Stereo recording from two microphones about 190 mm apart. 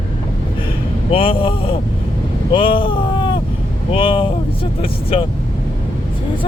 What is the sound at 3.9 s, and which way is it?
Vehicle, 25° left (ahead or behind).